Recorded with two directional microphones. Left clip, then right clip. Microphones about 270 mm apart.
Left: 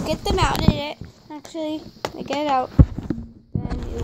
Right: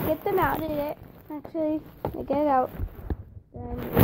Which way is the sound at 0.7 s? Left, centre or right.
Left.